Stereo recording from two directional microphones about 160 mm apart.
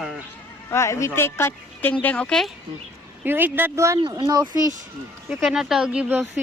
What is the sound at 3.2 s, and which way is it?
Speech, 10° right (ahead or behind).